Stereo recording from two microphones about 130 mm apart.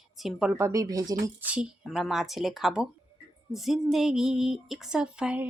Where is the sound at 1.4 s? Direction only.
10° right (ahead or behind).